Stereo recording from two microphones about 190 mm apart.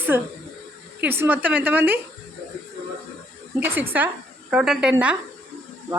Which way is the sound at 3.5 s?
10° right (ahead or behind).